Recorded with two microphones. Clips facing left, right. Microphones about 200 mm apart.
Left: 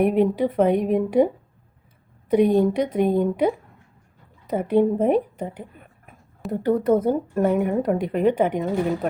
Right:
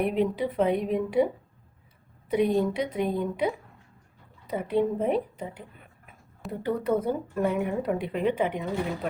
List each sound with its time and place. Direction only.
0.0 s speech: 50° left (ahead or behind)
2.3 s speech: 50° left (ahead or behind)